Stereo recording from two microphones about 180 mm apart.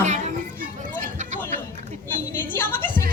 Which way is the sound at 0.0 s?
40° right (ahead or behind).